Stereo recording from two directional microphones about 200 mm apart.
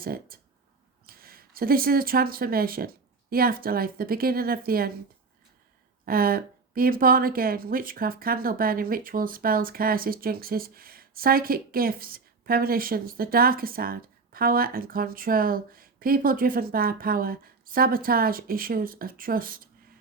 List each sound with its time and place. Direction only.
0.0 s speech: 45° right (ahead or behind)
6.1 s speech: 45° right (ahead or behind)